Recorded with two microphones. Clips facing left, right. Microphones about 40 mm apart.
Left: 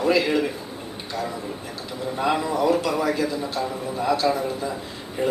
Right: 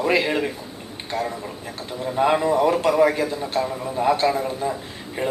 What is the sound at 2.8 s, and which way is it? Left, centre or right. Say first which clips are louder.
Speech: right 5 dB; right.